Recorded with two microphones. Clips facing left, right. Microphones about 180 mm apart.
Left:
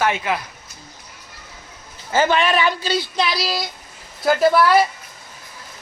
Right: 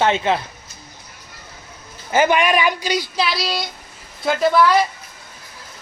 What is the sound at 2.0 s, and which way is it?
A man's voice, 15° right (ahead or behind).